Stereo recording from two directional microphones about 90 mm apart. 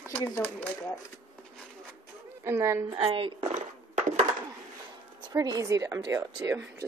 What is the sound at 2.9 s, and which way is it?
Speech, 75° right (ahead or behind).